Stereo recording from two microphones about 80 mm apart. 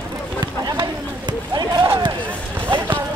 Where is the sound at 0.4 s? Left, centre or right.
Right.